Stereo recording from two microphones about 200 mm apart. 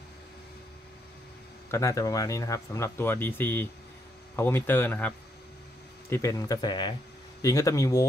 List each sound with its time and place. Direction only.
1.7 s speech: 15° left (ahead or behind)